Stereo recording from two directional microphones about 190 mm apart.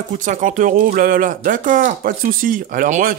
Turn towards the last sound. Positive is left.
turn(degrees=-45)  # may be behind; listen again after turning